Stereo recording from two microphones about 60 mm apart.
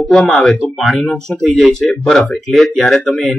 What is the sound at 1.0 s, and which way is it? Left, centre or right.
Speech, centre.